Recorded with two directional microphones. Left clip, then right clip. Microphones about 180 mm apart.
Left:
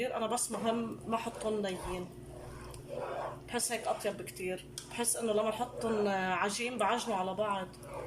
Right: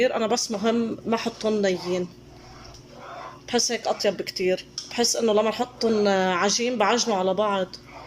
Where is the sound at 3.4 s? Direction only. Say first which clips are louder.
Right 13 dB; 40° right (ahead or behind).